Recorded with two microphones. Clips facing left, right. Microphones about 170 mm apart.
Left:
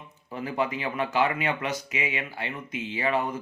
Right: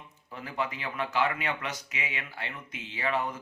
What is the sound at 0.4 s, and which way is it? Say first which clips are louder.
Speech: left 6 dB; 15° left (ahead or behind).